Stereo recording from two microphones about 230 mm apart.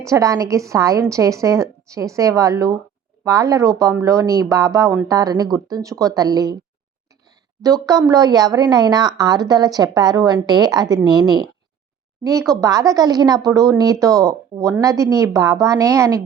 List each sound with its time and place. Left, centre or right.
0.1 s a woman's voice: centre